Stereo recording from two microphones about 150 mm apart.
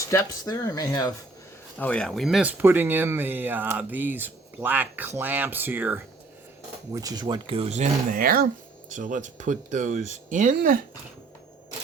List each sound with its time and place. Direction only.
0.1 s speech: 20° left (ahead or behind)
1.8 s speech: 5° left (ahead or behind); by 6.0 s 10° right (ahead or behind)
6.9 s speech: 25° right (ahead or behind); by 8.4 s 70° right (ahead or behind)
8.9 s speech: 60° right (ahead or behind)